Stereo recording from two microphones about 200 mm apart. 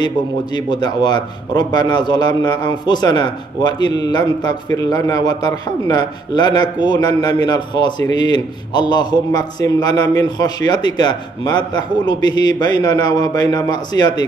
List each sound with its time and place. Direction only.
0.0 s a man's voice: 20° left (ahead or behind)